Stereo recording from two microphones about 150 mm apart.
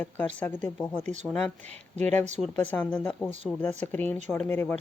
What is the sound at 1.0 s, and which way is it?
Speech, 50° right (ahead or behind).